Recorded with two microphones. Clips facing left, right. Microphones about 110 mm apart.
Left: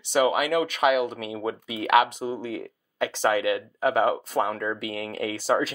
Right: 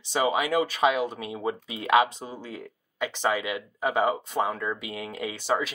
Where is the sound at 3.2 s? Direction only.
20° right (ahead or behind).